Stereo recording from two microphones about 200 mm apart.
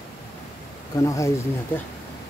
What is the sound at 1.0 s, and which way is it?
Speech, 15° left (ahead or behind).